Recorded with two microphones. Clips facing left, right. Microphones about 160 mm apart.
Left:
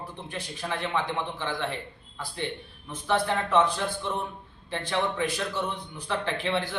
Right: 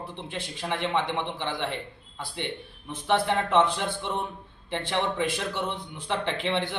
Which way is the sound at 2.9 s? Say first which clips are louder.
Right 1 dB; 25° right (ahead or behind).